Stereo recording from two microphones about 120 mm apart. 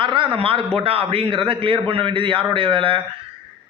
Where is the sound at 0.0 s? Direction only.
45° right (ahead or behind).